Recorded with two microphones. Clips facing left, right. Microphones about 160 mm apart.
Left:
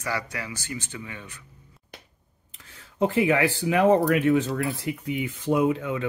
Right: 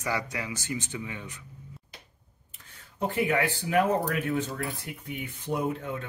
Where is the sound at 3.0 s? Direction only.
90° left.